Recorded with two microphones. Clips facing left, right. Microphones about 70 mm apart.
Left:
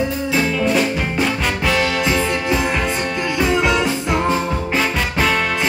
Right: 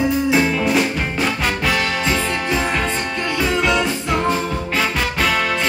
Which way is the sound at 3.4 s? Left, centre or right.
Centre.